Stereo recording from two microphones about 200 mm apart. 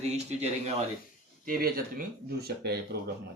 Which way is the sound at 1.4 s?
45° right (ahead or behind).